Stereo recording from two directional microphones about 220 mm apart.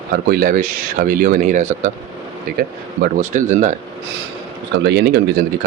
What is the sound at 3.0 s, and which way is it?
Speech, 35° right (ahead or behind).